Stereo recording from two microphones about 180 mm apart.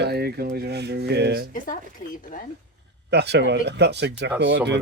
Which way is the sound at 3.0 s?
70° right (ahead or behind).